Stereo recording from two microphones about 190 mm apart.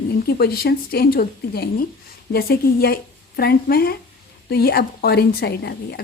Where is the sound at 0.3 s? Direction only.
55° left (ahead or behind).